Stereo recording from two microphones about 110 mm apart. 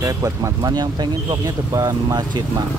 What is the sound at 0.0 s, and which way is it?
Speech, 30° right (ahead or behind).